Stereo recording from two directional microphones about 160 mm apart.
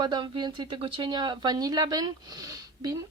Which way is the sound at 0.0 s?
30° right (ahead or behind).